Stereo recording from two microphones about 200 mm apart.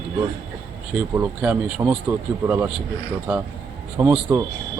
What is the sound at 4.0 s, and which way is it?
Speech, 10° right (ahead or behind).